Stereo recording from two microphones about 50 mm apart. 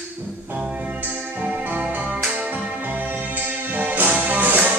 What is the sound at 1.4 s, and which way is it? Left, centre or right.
Music, right.